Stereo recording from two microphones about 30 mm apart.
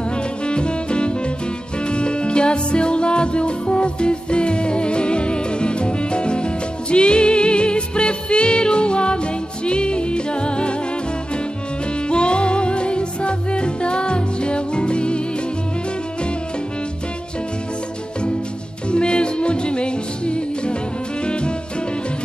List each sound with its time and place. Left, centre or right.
0.1 s music: left
12.1 s music: left
18.9 s music: left